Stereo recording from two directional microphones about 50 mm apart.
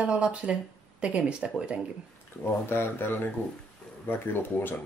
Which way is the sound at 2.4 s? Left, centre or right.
Left.